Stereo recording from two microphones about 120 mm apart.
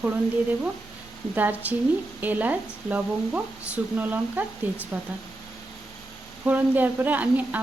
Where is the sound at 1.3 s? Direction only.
15° right (ahead or behind).